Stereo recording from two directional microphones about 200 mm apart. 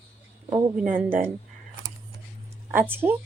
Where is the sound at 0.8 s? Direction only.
45° right (ahead or behind).